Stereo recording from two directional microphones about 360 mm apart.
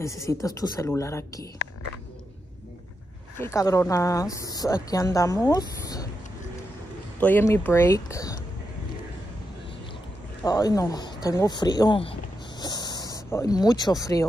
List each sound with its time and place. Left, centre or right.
0.0 s speech: centre
3.3 s a woman's voice: centre
7.2 s speech: centre
10.4 s speech: centre